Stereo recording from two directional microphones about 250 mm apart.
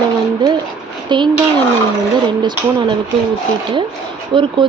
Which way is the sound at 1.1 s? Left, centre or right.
Centre.